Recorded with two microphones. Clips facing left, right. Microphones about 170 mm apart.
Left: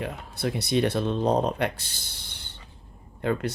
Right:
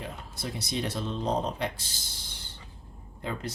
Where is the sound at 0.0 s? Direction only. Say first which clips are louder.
Left 8 dB; 65° left (ahead or behind).